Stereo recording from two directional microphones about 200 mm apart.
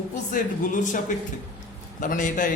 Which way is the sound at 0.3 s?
40° left (ahead or behind).